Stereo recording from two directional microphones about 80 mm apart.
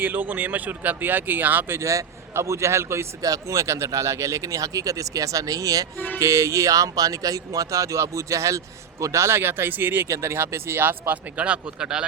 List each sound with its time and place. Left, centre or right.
0.0 s speech: right
1.9 s a man's voice: right
10.1 s speech: right; by 12.0 s centre